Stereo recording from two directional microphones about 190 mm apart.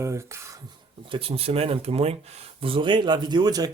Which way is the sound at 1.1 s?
30° right (ahead or behind).